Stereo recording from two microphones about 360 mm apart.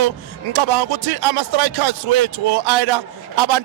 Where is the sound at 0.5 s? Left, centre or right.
Right.